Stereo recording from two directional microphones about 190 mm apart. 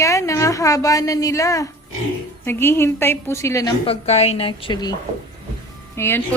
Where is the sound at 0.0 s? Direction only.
15° left (ahead or behind).